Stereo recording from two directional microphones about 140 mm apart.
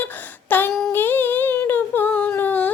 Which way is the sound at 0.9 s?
15° left (ahead or behind).